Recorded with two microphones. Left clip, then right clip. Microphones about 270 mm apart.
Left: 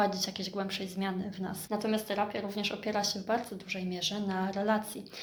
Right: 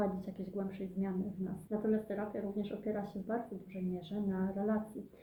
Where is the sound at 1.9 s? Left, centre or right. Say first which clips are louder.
Left 5 dB; left.